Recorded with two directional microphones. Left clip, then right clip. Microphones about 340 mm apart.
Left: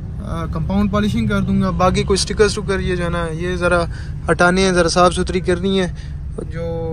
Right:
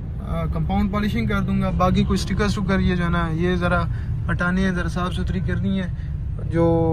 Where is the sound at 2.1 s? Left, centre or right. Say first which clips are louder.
Left 9 dB; centre.